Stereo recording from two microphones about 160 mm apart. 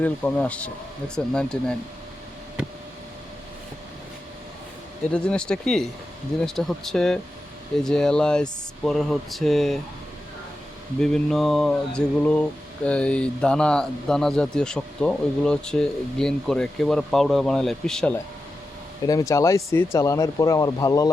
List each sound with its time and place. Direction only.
0.0 s speech: 10° left (ahead or behind)
5.1 s mantra: 5° left (ahead or behind)
11.0 s mantra: 5° left (ahead or behind)
19.0 s speech: 20° left (ahead or behind)